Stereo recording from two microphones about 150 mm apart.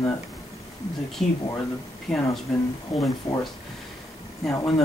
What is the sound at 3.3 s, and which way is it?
Speech, 50° left (ahead or behind).